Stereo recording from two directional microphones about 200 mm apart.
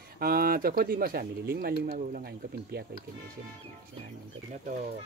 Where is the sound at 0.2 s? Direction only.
45° right (ahead or behind).